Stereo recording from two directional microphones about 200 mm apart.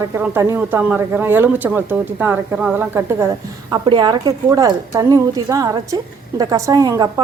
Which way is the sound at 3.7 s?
20° right (ahead or behind).